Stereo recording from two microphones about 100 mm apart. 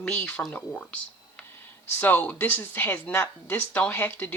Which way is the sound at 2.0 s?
20° left (ahead or behind).